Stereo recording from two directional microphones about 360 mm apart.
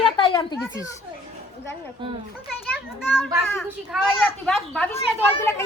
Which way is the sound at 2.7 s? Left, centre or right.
Centre.